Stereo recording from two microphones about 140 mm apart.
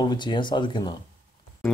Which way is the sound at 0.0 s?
30° left (ahead or behind).